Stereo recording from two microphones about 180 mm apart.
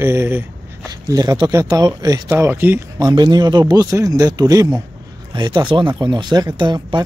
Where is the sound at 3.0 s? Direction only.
25° right (ahead or behind).